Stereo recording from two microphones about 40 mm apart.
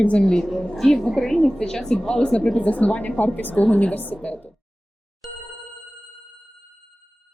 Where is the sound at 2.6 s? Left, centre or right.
Left.